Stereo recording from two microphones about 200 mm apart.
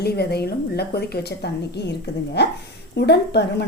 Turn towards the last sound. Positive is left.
turn(degrees=55)  # may be behind; listen again after turning